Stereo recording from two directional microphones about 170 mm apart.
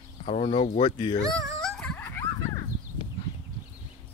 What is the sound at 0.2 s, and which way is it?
Speech, 40° left (ahead or behind).